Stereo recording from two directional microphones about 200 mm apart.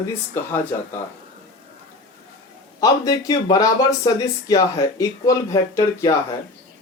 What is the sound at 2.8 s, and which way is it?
Speech, 20° left (ahead or behind).